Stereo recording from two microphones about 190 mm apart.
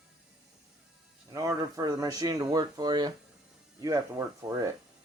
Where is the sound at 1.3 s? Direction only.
20° right (ahead or behind).